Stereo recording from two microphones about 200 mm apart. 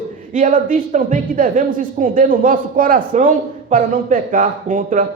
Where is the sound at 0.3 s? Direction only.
40° right (ahead or behind).